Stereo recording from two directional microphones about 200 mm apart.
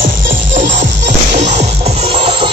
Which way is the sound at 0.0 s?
45° right (ahead or behind).